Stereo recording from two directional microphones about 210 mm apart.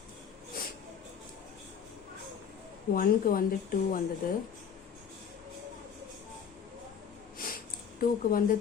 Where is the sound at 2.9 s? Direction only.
40° left (ahead or behind).